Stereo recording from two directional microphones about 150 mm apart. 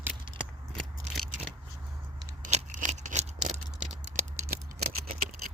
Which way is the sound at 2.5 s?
50° right (ahead or behind).